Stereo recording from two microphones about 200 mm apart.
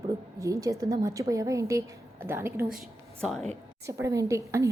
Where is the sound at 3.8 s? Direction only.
15° right (ahead or behind).